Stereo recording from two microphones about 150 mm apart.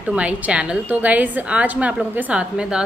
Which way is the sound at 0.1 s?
10° right (ahead or behind).